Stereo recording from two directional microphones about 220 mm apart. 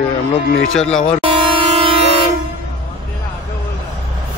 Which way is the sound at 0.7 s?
5° left (ahead or behind).